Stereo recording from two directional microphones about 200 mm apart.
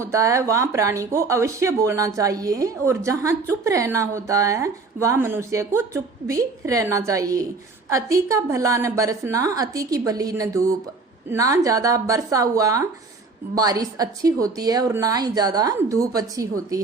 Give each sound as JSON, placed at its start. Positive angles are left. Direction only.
{"t": 0.0, "sound": "speech", "side_deg": -15}